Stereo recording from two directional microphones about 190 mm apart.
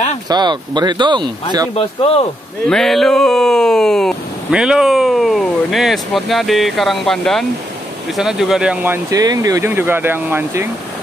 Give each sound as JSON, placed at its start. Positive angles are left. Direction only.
{"t": 0.3, "sound": "speech", "side_deg": -20}
{"t": 1.8, "sound": "speech", "side_deg": 30}
{"t": 2.7, "sound": "speech", "side_deg": 0}